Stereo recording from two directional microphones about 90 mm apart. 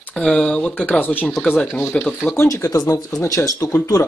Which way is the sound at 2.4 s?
35° left (ahead or behind).